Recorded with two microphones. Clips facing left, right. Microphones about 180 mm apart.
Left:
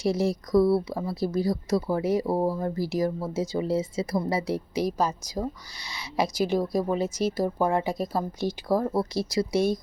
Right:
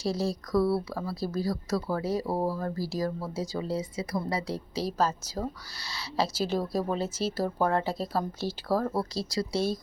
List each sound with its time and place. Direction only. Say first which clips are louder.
0.0 s speech: left 4 dB; 20° left (ahead or behind)